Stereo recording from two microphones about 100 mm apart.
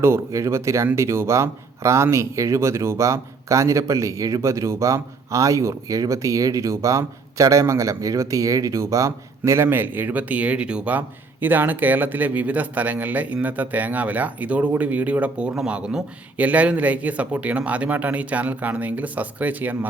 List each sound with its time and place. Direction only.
0.0 s speech: 30° right (ahead or behind)